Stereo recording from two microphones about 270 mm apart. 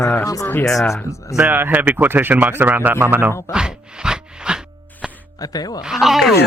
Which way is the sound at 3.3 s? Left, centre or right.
Centre.